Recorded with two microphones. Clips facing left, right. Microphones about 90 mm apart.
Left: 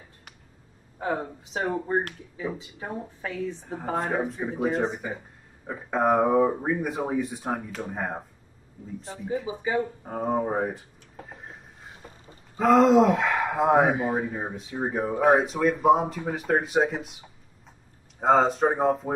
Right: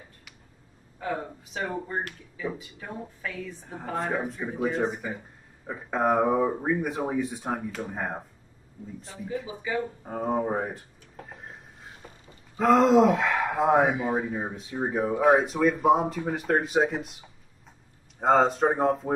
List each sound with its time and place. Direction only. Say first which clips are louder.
0.9 s speech: left 3 dB; 30° left (ahead or behind)
3.9 s speech: left 2 dB; centre (ahead or behind)
9.5 s speech: left 4 dB; 30° left (ahead or behind)
10.0 s a sound: left 1 dB; 5° left (ahead or behind)
12.5 s speech: left 1 dB; centre (ahead or behind)
13.8 s speech: left 2 dB; 40° left (ahead or behind)
14.1 s speech: even; centre (ahead or behind)